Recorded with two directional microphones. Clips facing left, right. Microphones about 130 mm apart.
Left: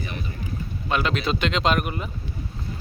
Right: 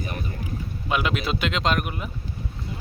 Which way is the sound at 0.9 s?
10° right (ahead or behind).